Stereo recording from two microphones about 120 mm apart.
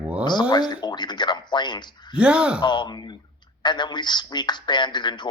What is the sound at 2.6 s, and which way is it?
Speech, 40° left (ahead or behind).